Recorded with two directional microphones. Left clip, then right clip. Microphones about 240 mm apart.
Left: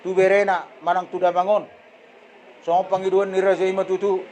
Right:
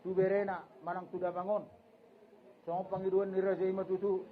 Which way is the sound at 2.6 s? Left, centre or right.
Left.